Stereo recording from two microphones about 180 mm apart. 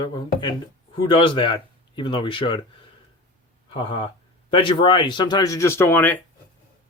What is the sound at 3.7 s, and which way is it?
Speech, 30° left (ahead or behind).